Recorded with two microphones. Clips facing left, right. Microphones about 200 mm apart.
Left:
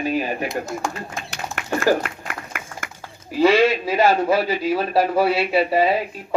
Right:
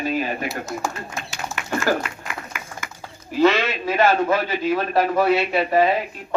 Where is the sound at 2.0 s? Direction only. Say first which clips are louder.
Left 1 dB; 55° left (ahead or behind).